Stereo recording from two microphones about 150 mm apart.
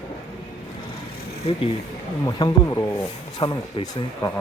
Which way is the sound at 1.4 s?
40° left (ahead or behind).